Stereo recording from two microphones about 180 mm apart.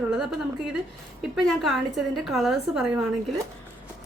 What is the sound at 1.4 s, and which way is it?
A woman's voice, centre (ahead or behind).